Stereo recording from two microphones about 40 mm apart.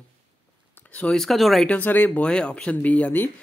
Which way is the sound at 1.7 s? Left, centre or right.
Left.